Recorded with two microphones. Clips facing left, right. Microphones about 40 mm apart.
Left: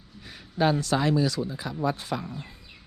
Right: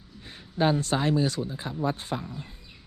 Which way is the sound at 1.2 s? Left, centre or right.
Right.